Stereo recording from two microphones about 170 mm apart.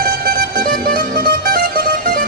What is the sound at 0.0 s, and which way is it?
Music, 55° right (ahead or behind).